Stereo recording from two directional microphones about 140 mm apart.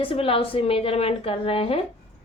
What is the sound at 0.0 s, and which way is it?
A woman's voice, 40° left (ahead or behind).